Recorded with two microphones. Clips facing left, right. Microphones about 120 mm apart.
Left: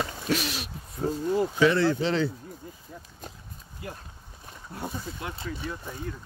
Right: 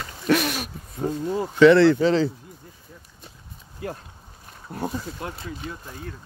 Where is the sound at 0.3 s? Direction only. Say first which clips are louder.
Right 9 dB; 55° right (ahead or behind).